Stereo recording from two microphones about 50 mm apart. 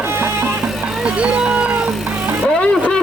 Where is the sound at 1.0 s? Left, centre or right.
Right.